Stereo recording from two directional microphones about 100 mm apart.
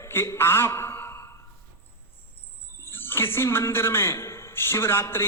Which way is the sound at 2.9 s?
20° left (ahead or behind).